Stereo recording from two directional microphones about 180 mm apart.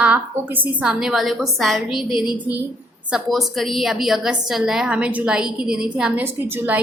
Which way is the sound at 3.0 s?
Centre (ahead or behind).